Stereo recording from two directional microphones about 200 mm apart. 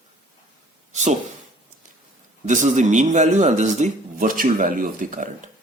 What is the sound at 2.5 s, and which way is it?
A man's voice, 40° right (ahead or behind).